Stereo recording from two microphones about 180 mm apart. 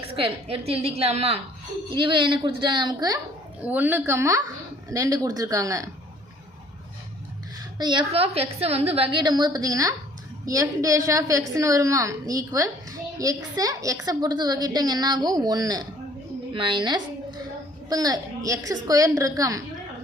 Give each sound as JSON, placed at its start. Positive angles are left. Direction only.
{"t": 0.1, "sound": "a woman's voice", "side_deg": -30}
{"t": 3.6, "sound": "a woman's voice", "side_deg": -10}
{"t": 7.8, "sound": "a woman's voice", "side_deg": -25}